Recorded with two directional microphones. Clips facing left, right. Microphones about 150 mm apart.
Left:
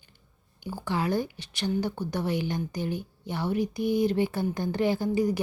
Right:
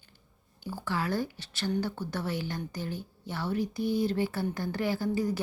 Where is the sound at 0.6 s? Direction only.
15° left (ahead or behind).